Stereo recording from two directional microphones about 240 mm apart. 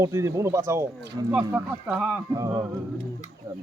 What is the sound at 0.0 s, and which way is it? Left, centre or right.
Speech, centre.